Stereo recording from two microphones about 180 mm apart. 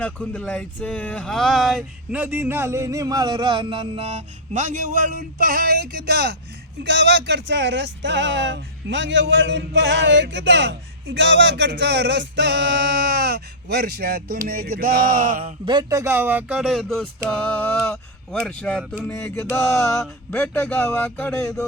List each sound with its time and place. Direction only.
0.0 s speech: 5° left (ahead or behind); by 15.5 s 45° right (ahead or behind)
15.6 s speech: 25° right (ahead or behind); by 17.1 s centre (ahead or behind)
17.2 s a sound: 10° left (ahead or behind)